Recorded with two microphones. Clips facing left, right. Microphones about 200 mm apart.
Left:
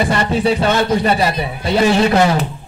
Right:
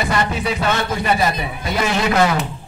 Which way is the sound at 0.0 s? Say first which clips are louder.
Left 5 dB; 30° left (ahead or behind).